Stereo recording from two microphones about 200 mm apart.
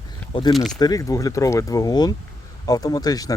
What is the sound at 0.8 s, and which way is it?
Speech, 15° left (ahead or behind).